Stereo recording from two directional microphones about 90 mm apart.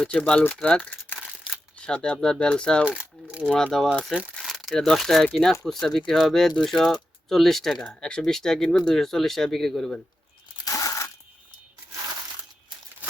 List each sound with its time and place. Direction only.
0.1 s speech: 15° left (ahead or behind)
3.0 s speech: 15° right (ahead or behind)
3.4 s speech: 5° left (ahead or behind)
10.7 s crumpling: 40° left (ahead or behind)